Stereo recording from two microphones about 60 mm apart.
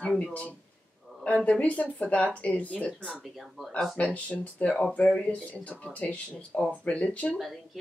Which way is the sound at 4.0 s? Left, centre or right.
Left.